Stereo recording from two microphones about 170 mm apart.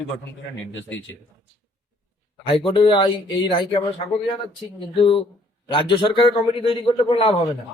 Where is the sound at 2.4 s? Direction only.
30° left (ahead or behind).